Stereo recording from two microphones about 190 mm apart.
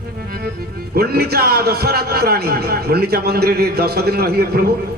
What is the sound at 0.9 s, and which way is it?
Speech, 55° right (ahead or behind).